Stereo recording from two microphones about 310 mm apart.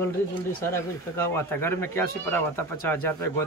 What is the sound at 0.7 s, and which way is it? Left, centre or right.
Speech, centre.